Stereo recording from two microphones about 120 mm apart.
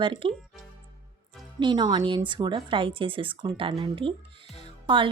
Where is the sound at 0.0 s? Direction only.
45° right (ahead or behind).